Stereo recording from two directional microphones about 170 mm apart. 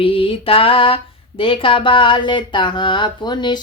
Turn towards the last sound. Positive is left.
turn(degrees=25)  # may be behind; listen again after turning